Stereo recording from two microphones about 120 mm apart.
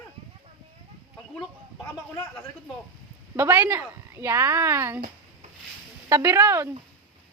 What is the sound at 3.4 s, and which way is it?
A woman's voice, 20° right (ahead or behind).